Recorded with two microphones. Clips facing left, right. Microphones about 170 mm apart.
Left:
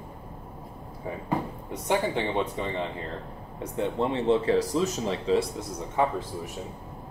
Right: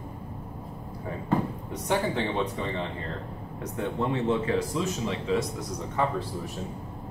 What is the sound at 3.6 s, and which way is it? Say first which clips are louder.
Speech: left 2 dB; 30° left (ahead or behind).